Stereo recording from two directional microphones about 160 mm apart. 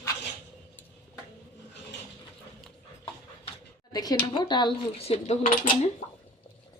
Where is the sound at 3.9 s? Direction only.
25° left (ahead or behind); by 5.3 s 40° left (ahead or behind).